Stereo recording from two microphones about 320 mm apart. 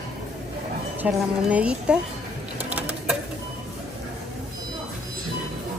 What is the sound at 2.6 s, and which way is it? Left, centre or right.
Sewing machine, centre.